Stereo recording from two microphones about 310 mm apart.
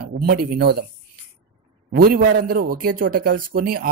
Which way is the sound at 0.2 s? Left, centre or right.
Right.